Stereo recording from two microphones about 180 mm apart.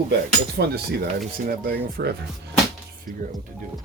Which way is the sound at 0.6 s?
70° right (ahead or behind).